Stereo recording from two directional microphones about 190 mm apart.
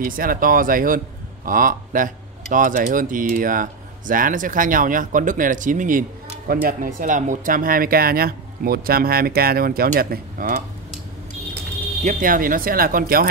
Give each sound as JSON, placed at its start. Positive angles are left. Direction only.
{"t": 0.0, "sound": "a man's voice", "side_deg": -50}
{"t": 12.0, "sound": "a man's voice", "side_deg": -45}